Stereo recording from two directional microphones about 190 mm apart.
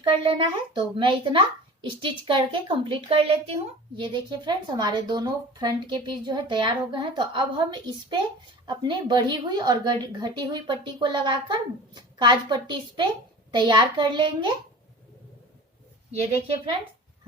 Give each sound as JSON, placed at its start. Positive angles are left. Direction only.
{"t": 0.0, "sound": "a child's voice", "side_deg": -25}